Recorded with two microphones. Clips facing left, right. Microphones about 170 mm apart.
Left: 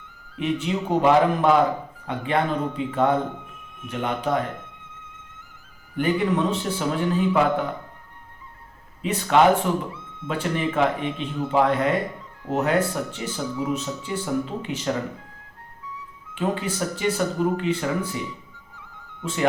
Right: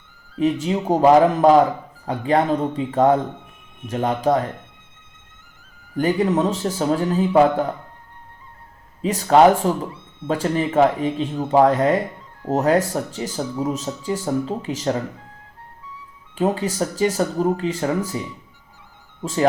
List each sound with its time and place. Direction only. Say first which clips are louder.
0.3 s speech: right 5 dB; 40° right (ahead or behind)
6.0 s speech: right 3 dB; 40° right (ahead or behind)
9.0 s speech: right 5 dB; 40° right (ahead or behind)
16.3 s speech: right 5 dB; 40° right (ahead or behind)
19.2 s speech: right 5 dB; 40° right (ahead or behind)